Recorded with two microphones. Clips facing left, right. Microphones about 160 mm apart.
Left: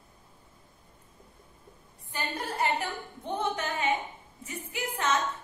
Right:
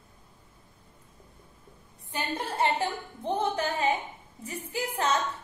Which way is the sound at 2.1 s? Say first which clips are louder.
Right 2 dB; 25° right (ahead or behind).